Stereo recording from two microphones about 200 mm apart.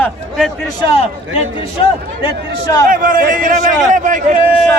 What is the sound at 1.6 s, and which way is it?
Speech, 25° left (ahead or behind).